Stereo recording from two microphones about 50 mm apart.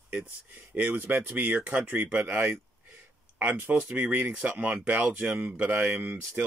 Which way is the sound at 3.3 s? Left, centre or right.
Right.